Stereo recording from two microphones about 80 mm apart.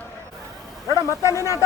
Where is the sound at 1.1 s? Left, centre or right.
Left.